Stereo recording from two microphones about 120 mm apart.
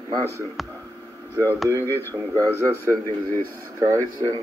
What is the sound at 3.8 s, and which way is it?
Speech, 25° right (ahead or behind).